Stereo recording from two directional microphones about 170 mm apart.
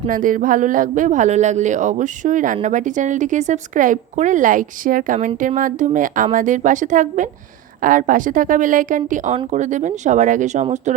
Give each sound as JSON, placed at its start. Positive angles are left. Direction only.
{"t": 0.1, "sound": "speech", "side_deg": -50}